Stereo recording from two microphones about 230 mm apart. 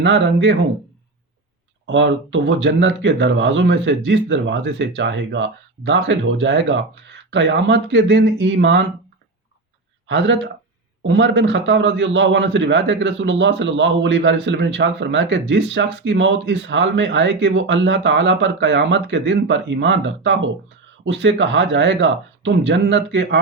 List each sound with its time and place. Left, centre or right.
0.0 s a man's voice: right
1.9 s a man's voice: right
10.1 s a man's voice: right